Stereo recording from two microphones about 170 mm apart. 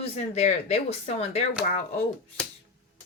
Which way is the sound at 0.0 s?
40° left (ahead or behind).